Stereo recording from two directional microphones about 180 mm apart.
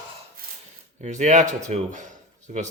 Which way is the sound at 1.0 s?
40° right (ahead or behind).